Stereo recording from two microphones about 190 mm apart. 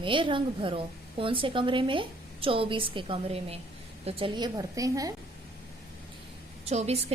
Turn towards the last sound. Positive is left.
turn(degrees=-35)  # may be behind; listen again after turning